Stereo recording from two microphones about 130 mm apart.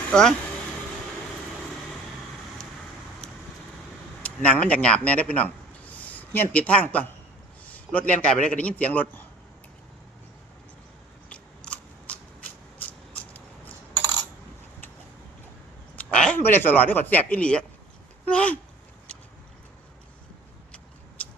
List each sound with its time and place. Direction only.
0.1 s speech: 5° left (ahead or behind)
4.2 s a man's voice: 10° left (ahead or behind)
11.3 s scissors: 10° left (ahead or behind)
13.9 s coin: 30° right (ahead or behind)
16.0 s speech: 10° left (ahead or behind)